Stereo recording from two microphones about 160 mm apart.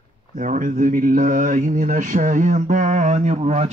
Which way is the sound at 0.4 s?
55° right (ahead or behind).